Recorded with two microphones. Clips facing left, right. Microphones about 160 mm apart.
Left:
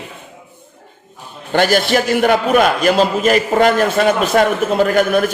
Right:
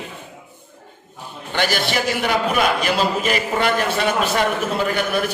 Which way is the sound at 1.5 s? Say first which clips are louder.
Left 8 dB; 50° left (ahead or behind).